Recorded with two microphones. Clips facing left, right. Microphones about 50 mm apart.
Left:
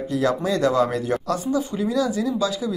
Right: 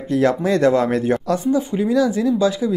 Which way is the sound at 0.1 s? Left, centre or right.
Right.